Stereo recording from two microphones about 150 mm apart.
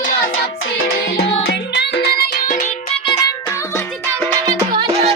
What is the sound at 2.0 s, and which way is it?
Music, 90° left.